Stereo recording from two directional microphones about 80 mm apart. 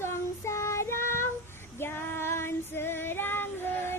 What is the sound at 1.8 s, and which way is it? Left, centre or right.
Female singing, left.